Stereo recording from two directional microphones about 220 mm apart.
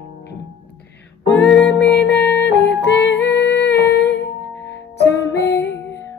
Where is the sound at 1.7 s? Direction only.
50° left (ahead or behind).